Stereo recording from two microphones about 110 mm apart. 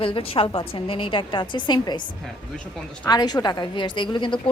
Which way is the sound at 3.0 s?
40° left (ahead or behind).